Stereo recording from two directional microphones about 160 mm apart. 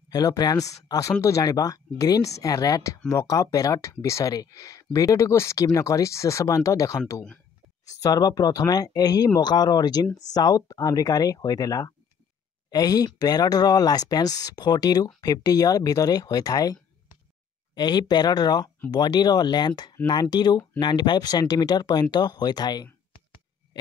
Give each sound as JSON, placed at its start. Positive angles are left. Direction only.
{"t": 0.1, "sound": "speech", "side_deg": 25}